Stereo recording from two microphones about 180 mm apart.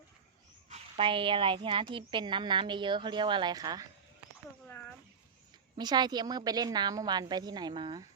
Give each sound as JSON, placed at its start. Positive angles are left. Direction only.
{"t": 0.7, "sound": "a woman's voice", "side_deg": -30}
{"t": 5.7, "sound": "a woman's voice", "side_deg": -25}